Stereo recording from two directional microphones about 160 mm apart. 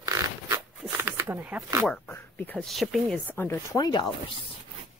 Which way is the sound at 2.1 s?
10° left (ahead or behind).